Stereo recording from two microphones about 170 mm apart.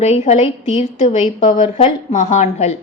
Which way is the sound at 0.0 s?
40° left (ahead or behind).